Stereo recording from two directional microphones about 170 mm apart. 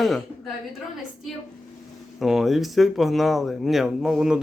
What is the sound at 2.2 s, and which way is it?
A man's voice, centre (ahead or behind).